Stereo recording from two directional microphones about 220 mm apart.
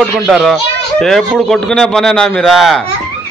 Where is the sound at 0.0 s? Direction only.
Centre (ahead or behind).